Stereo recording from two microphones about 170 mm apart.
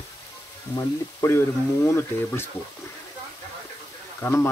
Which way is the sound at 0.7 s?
15° left (ahead or behind).